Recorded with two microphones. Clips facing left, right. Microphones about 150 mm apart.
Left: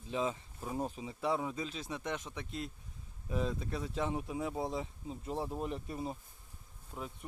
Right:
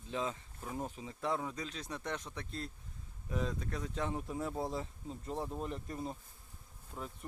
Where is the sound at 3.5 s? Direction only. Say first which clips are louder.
Left 2 dB; 10° left (ahead or behind).